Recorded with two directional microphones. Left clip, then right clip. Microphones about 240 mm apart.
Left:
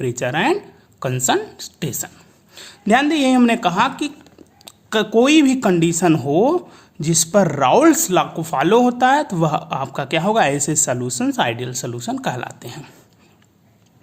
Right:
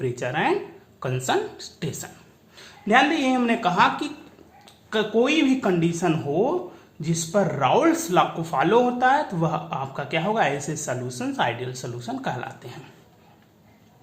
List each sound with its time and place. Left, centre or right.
0.0 s speech: left